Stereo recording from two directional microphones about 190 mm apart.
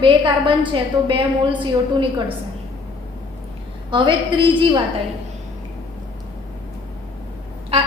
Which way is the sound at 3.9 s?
25° right (ahead or behind).